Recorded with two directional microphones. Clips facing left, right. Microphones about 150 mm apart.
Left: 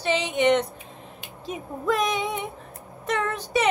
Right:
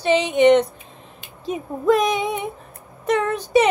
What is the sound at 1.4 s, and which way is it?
A woman's voice, 20° right (ahead or behind).